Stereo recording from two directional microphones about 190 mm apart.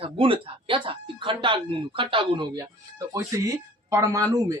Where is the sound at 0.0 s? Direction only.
30° right (ahead or behind).